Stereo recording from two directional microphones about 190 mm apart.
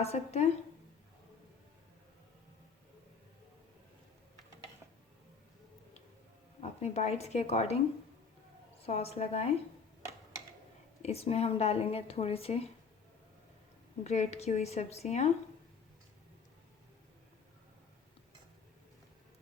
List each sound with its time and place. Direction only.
0.0 s a woman's voice: 35° left (ahead or behind)
6.6 s a woman's voice: 35° left (ahead or behind)
8.8 s a woman's voice: 30° left (ahead or behind)
11.0 s a woman's voice: 30° left (ahead or behind)
14.0 s a woman's voice: 35° left (ahead or behind)